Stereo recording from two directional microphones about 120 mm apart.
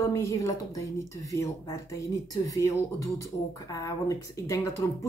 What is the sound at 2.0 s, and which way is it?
Speech, 30° left (ahead or behind).